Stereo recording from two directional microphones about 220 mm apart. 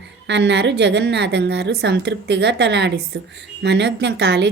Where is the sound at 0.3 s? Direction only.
55° right (ahead or behind).